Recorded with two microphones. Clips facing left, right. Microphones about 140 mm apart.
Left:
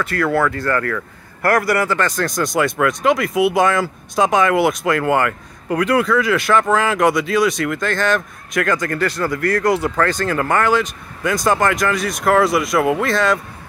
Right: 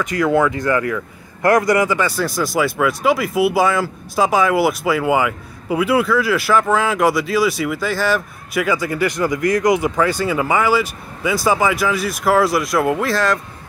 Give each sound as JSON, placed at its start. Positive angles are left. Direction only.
{"t": 0.0, "sound": "a man's voice", "side_deg": -15}